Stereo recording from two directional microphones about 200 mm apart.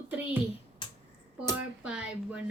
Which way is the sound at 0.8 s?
25° left (ahead or behind).